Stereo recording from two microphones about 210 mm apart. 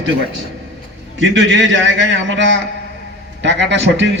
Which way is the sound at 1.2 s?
60° right (ahead or behind).